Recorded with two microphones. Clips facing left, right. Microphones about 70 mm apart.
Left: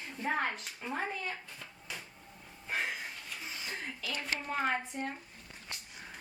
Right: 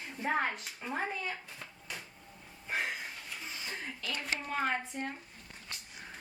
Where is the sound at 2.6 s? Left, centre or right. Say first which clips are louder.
Even; centre.